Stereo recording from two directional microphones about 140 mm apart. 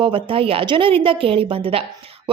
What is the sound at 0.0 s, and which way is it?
A woman's voice, 40° right (ahead or behind).